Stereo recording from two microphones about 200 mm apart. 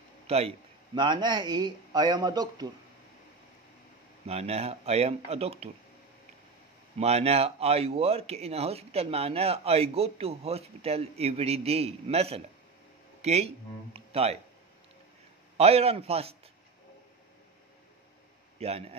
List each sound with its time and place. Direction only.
0.3 s speech: 30° right (ahead or behind)
4.3 s speech: 30° right (ahead or behind)
7.0 s speech: 30° right (ahead or behind)
15.5 s speech: 30° right (ahead or behind)
18.6 s speech: 30° right (ahead or behind)